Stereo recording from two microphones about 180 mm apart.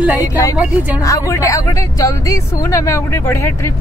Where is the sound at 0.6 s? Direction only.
10° right (ahead or behind).